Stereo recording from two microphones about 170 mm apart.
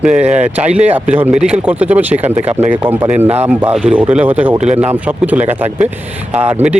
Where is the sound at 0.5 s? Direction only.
10° right (ahead or behind).